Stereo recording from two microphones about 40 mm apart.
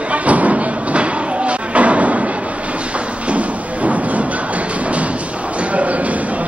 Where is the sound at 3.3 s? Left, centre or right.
Right.